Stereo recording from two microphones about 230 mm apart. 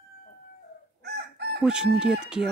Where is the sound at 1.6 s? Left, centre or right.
Centre.